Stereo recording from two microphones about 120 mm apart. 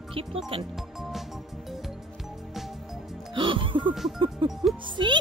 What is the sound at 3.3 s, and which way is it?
A child's voice, 45° right (ahead or behind).